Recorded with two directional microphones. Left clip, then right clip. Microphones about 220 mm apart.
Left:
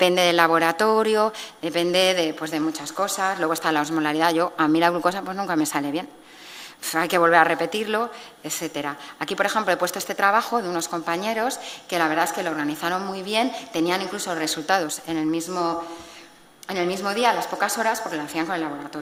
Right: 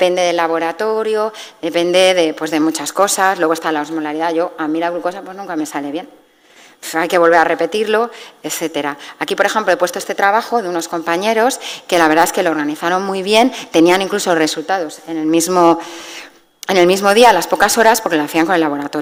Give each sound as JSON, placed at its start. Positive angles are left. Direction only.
{"t": 0.0, "sound": "speech", "side_deg": -5}
{"t": 1.6, "sound": "speech", "side_deg": -20}
{"t": 3.8, "sound": "speech", "side_deg": 0}
{"t": 6.9, "sound": "a woman's voice", "side_deg": -20}
{"t": 14.7, "sound": "a woman's voice", "side_deg": -10}
{"t": 15.3, "sound": "a woman's voice", "side_deg": -50}